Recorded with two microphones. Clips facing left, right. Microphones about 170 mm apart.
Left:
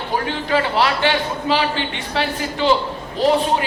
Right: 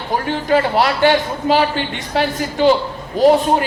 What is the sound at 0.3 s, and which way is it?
A woman's voice, 45° right (ahead or behind).